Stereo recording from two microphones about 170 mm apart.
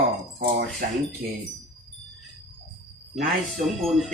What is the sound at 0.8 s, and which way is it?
Speech, 65° right (ahead or behind).